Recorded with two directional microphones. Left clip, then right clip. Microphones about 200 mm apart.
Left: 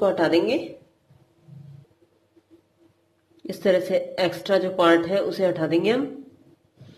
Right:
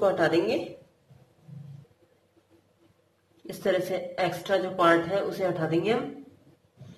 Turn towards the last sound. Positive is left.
turn(degrees=30)  # may be behind; listen again after turning